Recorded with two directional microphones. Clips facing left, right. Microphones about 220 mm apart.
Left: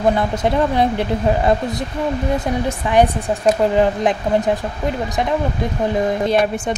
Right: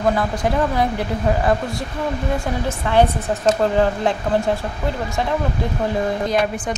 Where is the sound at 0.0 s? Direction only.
25° left (ahead or behind).